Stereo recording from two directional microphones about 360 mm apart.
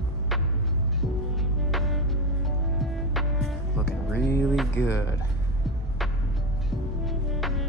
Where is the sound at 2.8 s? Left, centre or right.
Centre.